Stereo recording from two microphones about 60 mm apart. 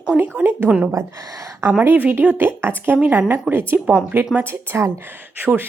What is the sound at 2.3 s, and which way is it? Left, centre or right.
A woman's voice, right.